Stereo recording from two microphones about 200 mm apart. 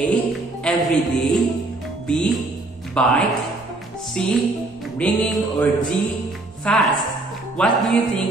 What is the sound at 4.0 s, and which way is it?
Music, centre (ahead or behind).